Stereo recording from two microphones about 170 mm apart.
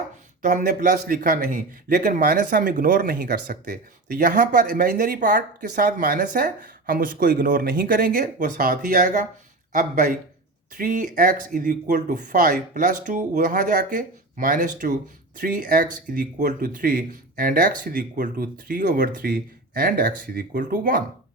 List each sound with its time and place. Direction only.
0.4 s speech: 55° right (ahead or behind)